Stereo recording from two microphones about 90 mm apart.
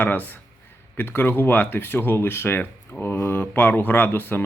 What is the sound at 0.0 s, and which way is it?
Speech, 20° left (ahead or behind).